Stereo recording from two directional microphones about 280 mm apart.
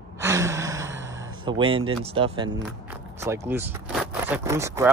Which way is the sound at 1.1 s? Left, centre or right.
Centre.